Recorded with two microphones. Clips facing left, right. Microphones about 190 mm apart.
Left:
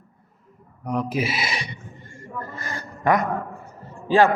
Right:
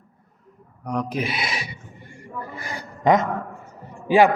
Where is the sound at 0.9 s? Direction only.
5° left (ahead or behind); by 3.2 s 20° right (ahead or behind).